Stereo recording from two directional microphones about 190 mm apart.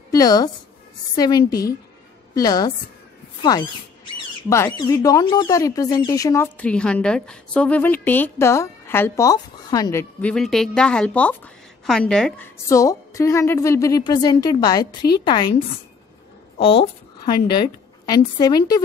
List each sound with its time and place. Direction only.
0.1 s a woman's voice: 20° left (ahead or behind)
10.2 s a woman's voice: centre (ahead or behind)
12.6 s speech: 15° left (ahead or behind)
16.5 s a woman's voice: 30° left (ahead or behind)